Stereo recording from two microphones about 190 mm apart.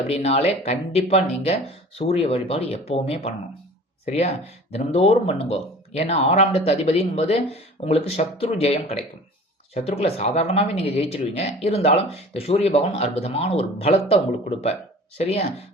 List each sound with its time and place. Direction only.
0.1 s speech: 35° left (ahead or behind)